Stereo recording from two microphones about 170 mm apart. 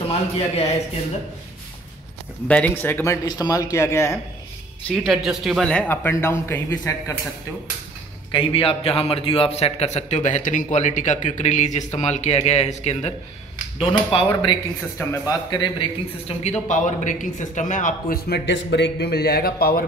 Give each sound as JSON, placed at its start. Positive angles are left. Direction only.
{"t": 2.4, "sound": "speech", "side_deg": 10}
{"t": 4.8, "sound": "speech", "side_deg": 0}
{"t": 8.3, "sound": "a man's voice", "side_deg": 30}